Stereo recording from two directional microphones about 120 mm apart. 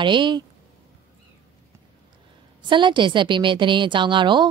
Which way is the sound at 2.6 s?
40° right (ahead or behind).